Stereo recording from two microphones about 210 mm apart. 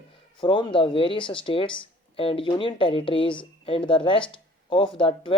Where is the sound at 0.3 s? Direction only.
20° left (ahead or behind).